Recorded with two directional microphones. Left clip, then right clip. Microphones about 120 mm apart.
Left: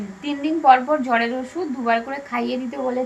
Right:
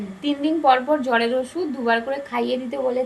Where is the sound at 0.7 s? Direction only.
25° right (ahead or behind).